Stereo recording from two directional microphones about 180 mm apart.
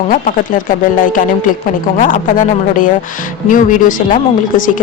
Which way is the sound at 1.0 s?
50° left (ahead or behind).